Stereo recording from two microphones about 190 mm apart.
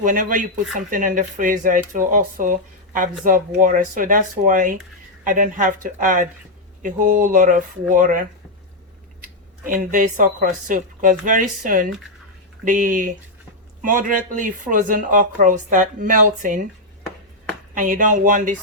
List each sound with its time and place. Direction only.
0.0 s speech: 45° right (ahead or behind)
9.6 s speech: 45° right (ahead or behind)
17.7 s speech: 45° right (ahead or behind)